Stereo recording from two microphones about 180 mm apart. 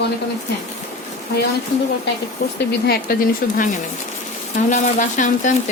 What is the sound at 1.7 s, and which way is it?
Speech, 60° left (ahead or behind).